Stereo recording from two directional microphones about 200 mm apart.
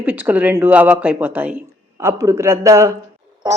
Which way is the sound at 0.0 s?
10° right (ahead or behind).